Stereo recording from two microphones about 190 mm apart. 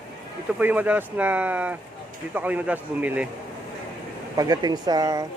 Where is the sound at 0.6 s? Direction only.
10° right (ahead or behind).